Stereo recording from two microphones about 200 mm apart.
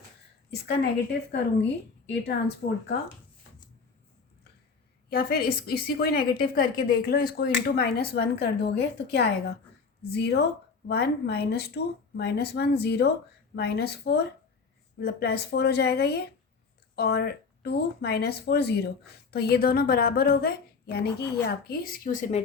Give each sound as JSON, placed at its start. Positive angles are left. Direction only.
{"t": 0.5, "sound": "a woman's voice", "side_deg": 55}
{"t": 5.0, "sound": "a woman's voice", "side_deg": 50}